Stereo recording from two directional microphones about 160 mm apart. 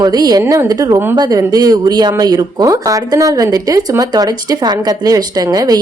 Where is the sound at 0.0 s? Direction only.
25° right (ahead or behind).